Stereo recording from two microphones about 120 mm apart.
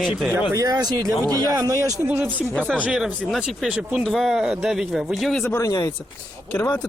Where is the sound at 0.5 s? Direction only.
30° right (ahead or behind); by 5.4 s centre (ahead or behind).